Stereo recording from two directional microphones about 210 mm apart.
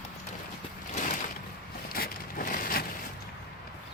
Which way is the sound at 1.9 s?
45° left (ahead or behind).